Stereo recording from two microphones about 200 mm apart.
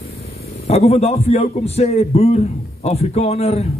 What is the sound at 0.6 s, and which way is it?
A man's voice, 30° left (ahead or behind).